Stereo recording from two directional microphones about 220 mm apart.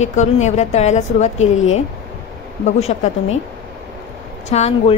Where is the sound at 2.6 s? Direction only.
30° left (ahead or behind).